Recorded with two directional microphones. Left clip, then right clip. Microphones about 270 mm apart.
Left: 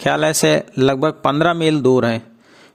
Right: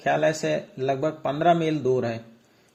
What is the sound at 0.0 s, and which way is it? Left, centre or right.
A man's voice, left.